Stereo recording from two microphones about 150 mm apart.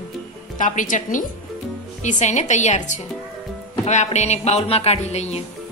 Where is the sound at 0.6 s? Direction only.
60° left (ahead or behind).